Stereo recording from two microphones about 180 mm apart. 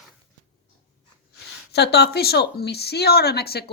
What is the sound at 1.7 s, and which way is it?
Speech, 65° left (ahead or behind).